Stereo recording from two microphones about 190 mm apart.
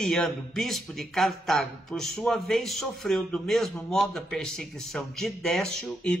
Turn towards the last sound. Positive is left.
turn(degrees=0)  # may be behind; listen again after turning